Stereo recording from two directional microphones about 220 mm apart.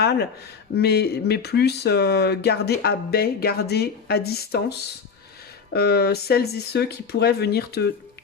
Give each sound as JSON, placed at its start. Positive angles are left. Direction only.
{"t": 0.0, "sound": "speech", "side_deg": 45}